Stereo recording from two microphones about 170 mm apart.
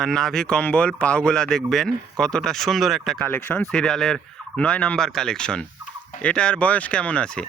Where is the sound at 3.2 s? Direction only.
10° left (ahead or behind).